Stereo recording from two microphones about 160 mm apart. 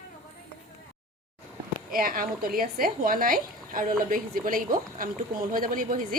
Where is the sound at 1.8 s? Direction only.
60° right (ahead or behind).